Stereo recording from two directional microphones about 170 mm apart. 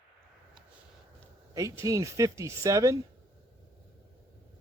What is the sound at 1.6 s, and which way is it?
Speech, 20° right (ahead or behind).